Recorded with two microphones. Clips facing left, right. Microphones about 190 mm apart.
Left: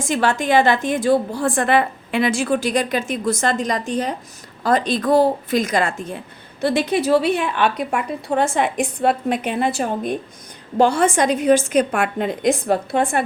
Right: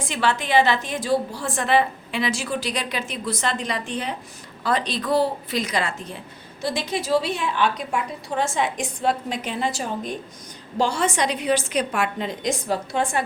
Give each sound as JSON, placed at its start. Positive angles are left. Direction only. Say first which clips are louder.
{"t": 0.0, "sound": "a woman's voice", "louder": "left 5 dB", "side_deg": 45}
{"t": 6.6, "sound": "a woman's voice", "louder": "left 8 dB", "side_deg": 60}